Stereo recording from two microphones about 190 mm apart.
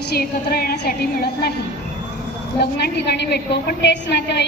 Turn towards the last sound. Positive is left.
turn(degrees=65)  # may be behind; listen again after turning